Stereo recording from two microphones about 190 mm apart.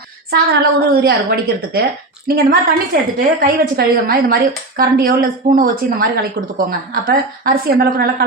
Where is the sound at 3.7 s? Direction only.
50° right (ahead or behind).